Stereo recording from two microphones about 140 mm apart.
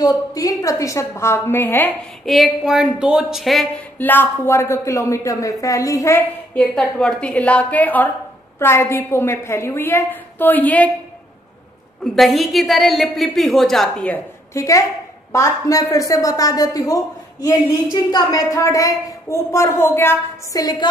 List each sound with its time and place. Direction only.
0.0 s a woman's voice: 25° left (ahead or behind)
2.2 s a woman's voice: centre (ahead or behind)
4.0 s a woman's voice: 15° left (ahead or behind)
6.5 s a woman's voice: 10° left (ahead or behind)
12.0 s a woman's voice: centre (ahead or behind)
14.6 s a woman's voice: 25° left (ahead or behind)
20.5 s a woman's voice: 30° left (ahead or behind)